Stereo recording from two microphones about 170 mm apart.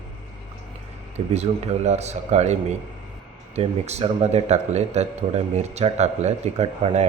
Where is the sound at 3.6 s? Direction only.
40° right (ahead or behind).